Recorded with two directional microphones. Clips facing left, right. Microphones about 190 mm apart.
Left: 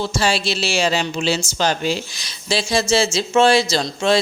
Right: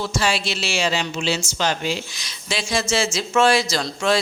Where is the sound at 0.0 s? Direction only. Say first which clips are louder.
Left 3 dB; 30° left (ahead or behind).